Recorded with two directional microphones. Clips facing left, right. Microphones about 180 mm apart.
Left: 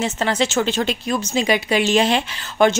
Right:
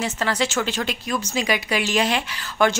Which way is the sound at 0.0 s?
25° left (ahead or behind).